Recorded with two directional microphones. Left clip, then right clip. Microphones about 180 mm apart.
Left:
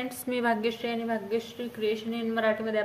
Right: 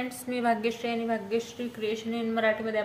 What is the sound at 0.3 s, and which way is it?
Speech, 30° left (ahead or behind).